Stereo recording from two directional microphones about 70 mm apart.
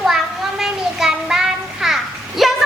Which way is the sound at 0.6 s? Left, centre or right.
Centre.